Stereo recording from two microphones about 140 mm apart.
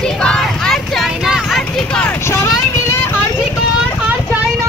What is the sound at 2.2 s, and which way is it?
Vehicle, 20° left (ahead or behind).